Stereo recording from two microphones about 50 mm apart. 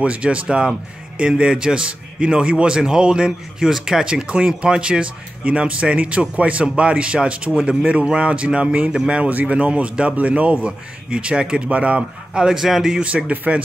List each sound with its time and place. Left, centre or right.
0.0 s a man's voice: right
9.3 s a man's voice: right
12.4 s a man's voice: centre
13.0 s a man's voice: right